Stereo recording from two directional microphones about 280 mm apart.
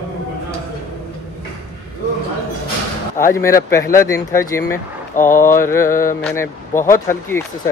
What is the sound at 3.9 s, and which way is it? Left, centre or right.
Speech, centre.